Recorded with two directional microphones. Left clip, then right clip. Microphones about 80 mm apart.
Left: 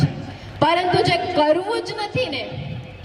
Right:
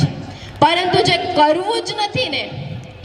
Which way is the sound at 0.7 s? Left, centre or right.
Right.